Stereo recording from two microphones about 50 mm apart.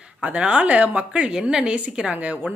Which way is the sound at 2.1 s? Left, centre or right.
Right.